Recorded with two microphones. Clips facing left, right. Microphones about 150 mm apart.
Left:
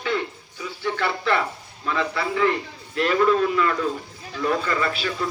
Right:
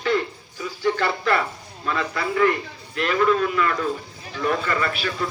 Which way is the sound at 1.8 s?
15° left (ahead or behind).